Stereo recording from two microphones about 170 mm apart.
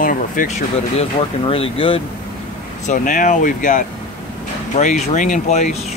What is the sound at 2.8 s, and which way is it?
Speech, 50° left (ahead or behind).